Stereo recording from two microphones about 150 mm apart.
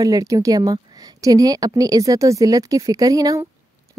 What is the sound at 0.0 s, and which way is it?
A woman's voice, 20° right (ahead or behind).